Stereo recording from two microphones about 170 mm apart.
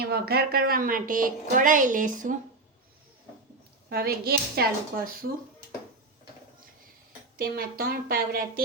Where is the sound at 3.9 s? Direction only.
65° right (ahead or behind).